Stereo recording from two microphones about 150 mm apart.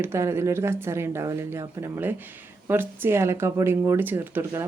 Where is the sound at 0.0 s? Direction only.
15° right (ahead or behind).